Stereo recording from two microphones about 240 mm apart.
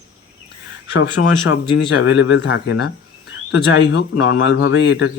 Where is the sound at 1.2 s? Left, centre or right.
Left.